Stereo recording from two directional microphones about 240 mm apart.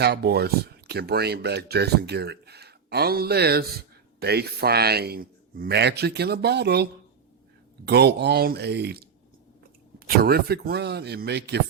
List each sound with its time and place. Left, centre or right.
0.0 s speech: right
7.9 s speech: right
10.2 s speech: right